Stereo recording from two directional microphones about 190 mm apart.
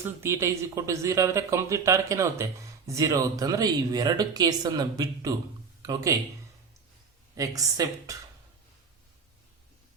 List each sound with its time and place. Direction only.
0.0 s speech: 15° right (ahead or behind)
7.3 s speech: 20° right (ahead or behind)